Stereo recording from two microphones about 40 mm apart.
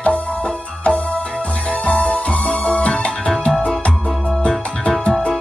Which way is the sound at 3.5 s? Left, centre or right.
Centre.